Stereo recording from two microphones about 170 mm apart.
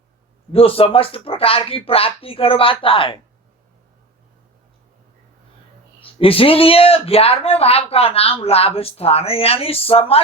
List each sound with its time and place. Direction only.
0.5 s speech: 35° left (ahead or behind)
6.0 s speech: 35° left (ahead or behind)